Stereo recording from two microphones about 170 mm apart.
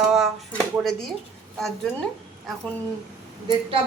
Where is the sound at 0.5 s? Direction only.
5° left (ahead or behind).